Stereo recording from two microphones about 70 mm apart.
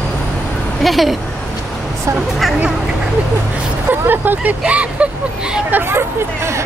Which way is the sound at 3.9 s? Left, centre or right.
Right.